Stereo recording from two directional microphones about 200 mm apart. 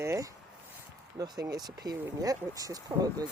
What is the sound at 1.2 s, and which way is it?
Speech, 15° right (ahead or behind).